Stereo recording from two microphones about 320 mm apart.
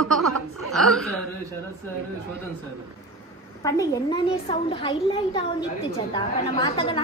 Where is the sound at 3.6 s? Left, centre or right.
Centre.